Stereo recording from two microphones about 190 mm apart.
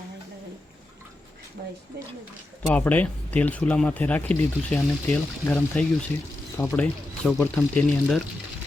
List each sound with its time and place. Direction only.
1.6 s speech: 60° right (ahead or behind)
2.7 s speech: 10° left (ahead or behind)